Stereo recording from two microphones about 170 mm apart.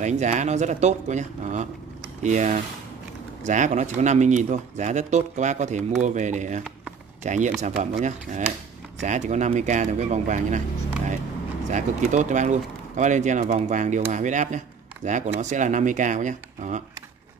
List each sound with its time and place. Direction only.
0.0 s speech: 45° right (ahead or behind)
12.1 s speech: 45° right (ahead or behind)